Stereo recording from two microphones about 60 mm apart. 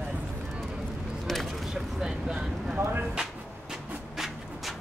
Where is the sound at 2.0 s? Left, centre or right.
Centre.